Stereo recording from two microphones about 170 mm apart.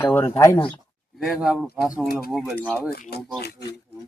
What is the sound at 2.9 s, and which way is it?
Speech, 65° left (ahead or behind).